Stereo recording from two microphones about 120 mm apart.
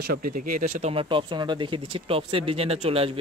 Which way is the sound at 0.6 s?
90° right.